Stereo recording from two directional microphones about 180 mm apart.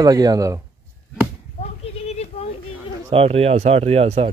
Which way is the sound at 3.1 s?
30° right (ahead or behind).